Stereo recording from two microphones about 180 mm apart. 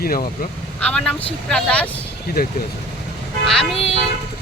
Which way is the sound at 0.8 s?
5° left (ahead or behind).